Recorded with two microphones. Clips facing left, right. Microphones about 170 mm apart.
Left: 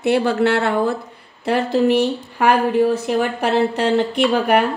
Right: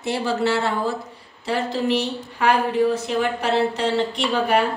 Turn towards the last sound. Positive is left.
turn(degrees=60)  # may be behind; listen again after turning